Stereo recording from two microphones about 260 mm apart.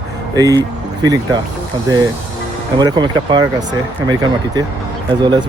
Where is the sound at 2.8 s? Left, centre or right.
Centre.